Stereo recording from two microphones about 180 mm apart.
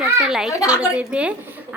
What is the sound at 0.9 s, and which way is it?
Speech, 5° right (ahead or behind).